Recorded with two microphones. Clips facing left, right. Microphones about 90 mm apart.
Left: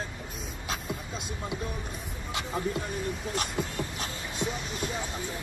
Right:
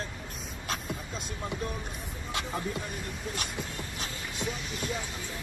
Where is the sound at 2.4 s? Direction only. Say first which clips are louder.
Left 3 dB; 20° left (ahead or behind).